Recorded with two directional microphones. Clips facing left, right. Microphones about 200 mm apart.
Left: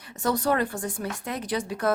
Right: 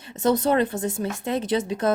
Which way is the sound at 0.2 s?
20° right (ahead or behind).